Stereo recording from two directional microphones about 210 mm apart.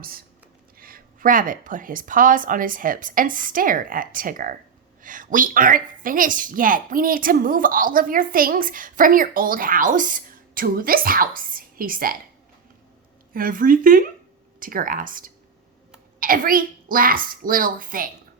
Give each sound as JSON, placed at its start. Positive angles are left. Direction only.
{"t": 0.0, "sound": "a woman's voice", "side_deg": -45}
{"t": 13.3, "sound": "a woman's voice", "side_deg": -40}